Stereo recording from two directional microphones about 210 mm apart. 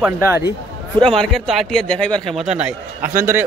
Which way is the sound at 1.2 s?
Centre (ahead or behind).